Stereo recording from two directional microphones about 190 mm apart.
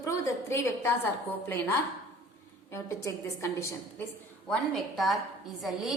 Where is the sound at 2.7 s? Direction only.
15° left (ahead or behind).